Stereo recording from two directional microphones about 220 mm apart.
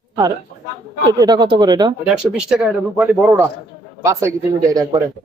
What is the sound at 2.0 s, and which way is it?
Speech, 5° right (ahead or behind).